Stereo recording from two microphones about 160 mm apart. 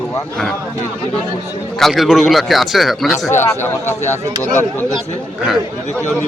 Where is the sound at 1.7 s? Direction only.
Centre (ahead or behind).